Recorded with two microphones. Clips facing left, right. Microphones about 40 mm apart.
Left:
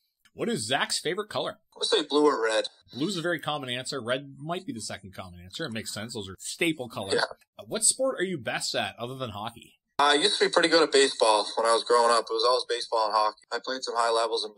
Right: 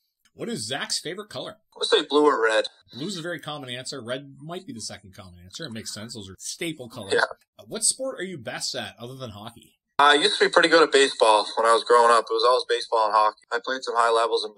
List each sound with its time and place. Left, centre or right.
0.4 s speech: left
1.8 s speech: right
3.1 s speech: left
9.9 s speech: right